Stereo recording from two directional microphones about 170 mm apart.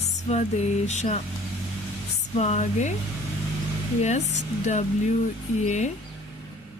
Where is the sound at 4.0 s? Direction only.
40° left (ahead or behind).